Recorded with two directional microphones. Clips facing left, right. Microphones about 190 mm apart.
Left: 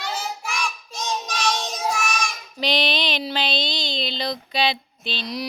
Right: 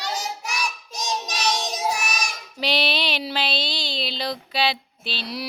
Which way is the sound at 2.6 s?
10° right (ahead or behind).